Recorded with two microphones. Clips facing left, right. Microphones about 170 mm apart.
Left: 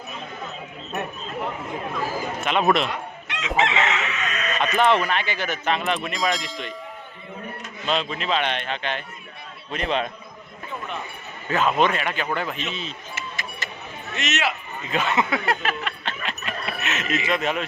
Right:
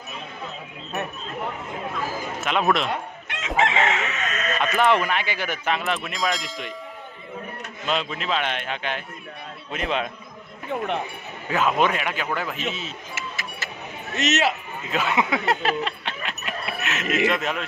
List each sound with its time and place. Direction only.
2.4 s speech: centre (ahead or behind)
3.7 s speech: 45° right (ahead or behind)
4.6 s speech: 10° right (ahead or behind)
7.9 s a man's voice: 5° right (ahead or behind)
10.7 s speech: 70° right (ahead or behind)
11.4 s a man's voice: 10° right (ahead or behind)
12.7 s music: 5° right (ahead or behind)
14.2 s a man's voice: 40° right (ahead or behind)
14.8 s a man's voice: 5° right (ahead or behind)
15.6 s a man's voice: 30° right (ahead or behind)
16.0 s a sound: 5° right (ahead or behind)
17.2 s speech: centre (ahead or behind)